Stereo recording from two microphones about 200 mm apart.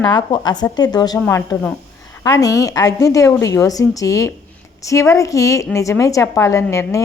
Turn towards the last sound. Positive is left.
turn(degrees=15)  # may be behind; listen again after turning